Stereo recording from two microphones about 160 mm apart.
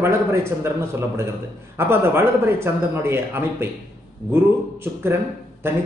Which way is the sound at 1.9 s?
15° right (ahead or behind).